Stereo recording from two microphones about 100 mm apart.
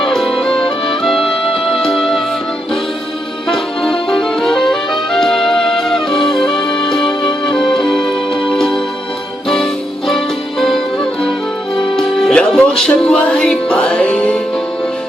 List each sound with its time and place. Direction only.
0.0 s music: centre (ahead or behind)
1.5 s music: 5° left (ahead or behind)
3.8 s music: 5° left (ahead or behind)
6.1 s music: 55° left (ahead or behind)
6.7 s music: 5° left (ahead or behind)
10.1 s music: 5° left (ahead or behind)